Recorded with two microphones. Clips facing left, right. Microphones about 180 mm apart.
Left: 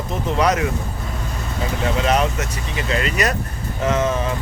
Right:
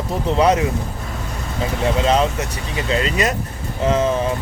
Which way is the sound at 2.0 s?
25° right (ahead or behind).